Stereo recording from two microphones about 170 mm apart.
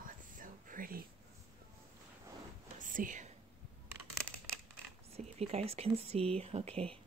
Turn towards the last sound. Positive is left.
turn(degrees=-35)  # may be behind; listen again after turning